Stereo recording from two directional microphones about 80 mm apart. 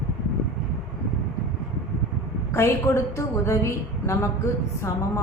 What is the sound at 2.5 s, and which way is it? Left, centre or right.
Speech, left.